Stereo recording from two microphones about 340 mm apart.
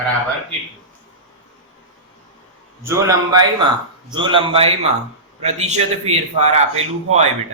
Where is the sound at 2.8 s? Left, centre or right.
Centre.